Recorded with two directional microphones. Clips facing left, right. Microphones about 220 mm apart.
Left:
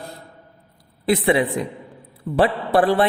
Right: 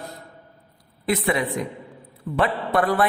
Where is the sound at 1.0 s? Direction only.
30° left (ahead or behind).